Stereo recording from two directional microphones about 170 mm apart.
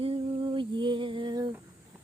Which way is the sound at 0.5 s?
30° right (ahead or behind).